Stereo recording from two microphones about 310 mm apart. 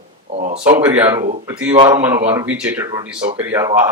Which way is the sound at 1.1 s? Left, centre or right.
Right.